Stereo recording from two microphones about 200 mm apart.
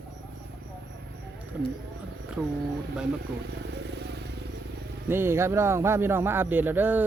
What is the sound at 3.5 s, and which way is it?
Vehicle, 60° right (ahead or behind).